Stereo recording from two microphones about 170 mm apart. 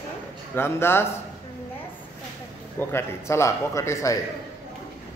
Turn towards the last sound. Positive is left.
turn(degrees=15)  # may be behind; listen again after turning